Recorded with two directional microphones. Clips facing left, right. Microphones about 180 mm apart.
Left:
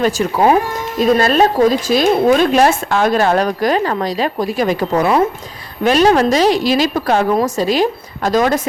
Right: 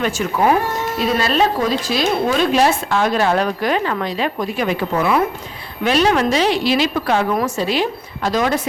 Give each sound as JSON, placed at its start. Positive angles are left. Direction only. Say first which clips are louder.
{"t": 0.0, "sound": "a woman's voice", "louder": "left 4 dB", "side_deg": 35}
{"t": 0.9, "sound": "a woman's voice", "louder": "left 6 dB", "side_deg": 45}